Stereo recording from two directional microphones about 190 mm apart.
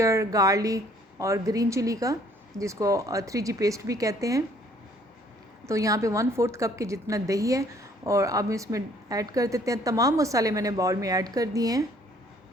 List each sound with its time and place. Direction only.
0.0 s a woman's voice: 15° right (ahead or behind)
5.6 s a woman's voice: 15° right (ahead or behind)